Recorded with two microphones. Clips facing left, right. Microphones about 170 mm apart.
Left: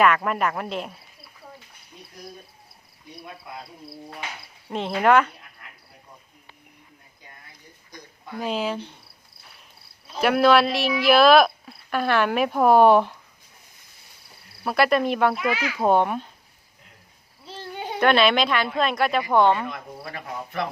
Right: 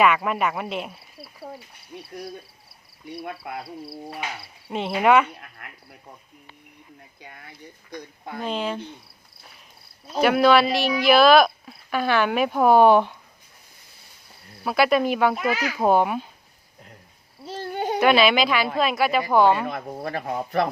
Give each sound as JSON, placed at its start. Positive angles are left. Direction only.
{"t": 0.0, "sound": "speech", "side_deg": -5}
{"t": 3.1, "sound": "speech", "side_deg": -65}
{"t": 4.7, "sound": "speech", "side_deg": -5}
{"t": 5.6, "sound": "a sound", "side_deg": -65}
{"t": 8.4, "sound": "speech", "side_deg": 5}
{"t": 10.2, "sound": "speech", "side_deg": 0}
{"t": 14.6, "sound": "speech", "side_deg": 0}
{"t": 17.4, "sound": "a sound", "side_deg": -45}
{"t": 18.0, "sound": "speech", "side_deg": -5}
{"t": 19.6, "sound": "speech", "side_deg": -40}